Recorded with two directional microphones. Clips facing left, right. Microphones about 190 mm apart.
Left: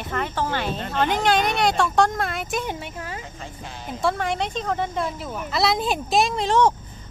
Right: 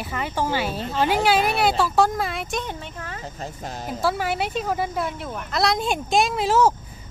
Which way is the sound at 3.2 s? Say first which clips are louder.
Right 4 dB; 40° right (ahead or behind).